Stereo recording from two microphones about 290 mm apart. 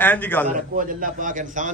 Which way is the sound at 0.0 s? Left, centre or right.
Centre.